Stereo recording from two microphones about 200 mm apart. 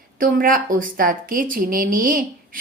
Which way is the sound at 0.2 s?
45° right (ahead or behind).